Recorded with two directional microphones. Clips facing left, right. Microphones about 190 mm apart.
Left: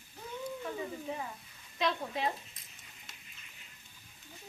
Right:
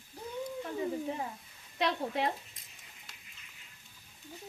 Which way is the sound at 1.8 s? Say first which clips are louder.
Right 2 dB; 65° right (ahead or behind).